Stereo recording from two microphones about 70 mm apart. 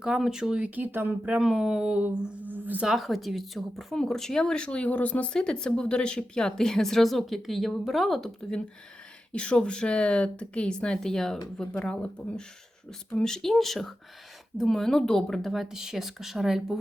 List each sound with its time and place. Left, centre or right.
0.0 s speech: centre
0.8 s speech: right
1.4 s speech: centre
2.0 s a sound: right
2.8 s speech: centre